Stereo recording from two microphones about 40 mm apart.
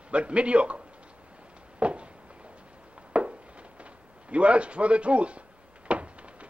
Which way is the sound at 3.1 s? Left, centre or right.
Right.